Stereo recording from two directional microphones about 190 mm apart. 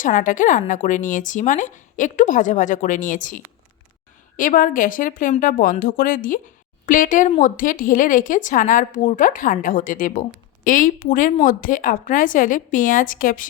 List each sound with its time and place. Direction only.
0.0 s speech: 45° left (ahead or behind)